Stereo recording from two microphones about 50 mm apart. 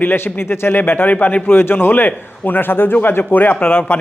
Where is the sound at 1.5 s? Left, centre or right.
Left.